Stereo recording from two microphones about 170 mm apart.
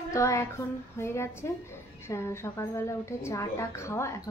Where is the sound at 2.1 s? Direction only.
15° left (ahead or behind).